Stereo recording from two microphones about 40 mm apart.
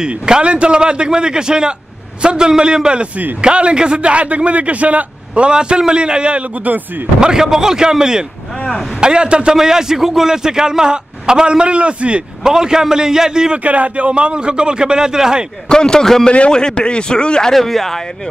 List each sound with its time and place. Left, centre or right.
0.0 s a man's voice: right
7.2 s a man's voice: centre
9.6 s a man's voice: centre; by 12.2 s right
12.4 s a man's voice: centre
13.6 s a man's voice: right; by 15.4 s centre
15.7 s a man's voice: centre
17.5 s speech: centre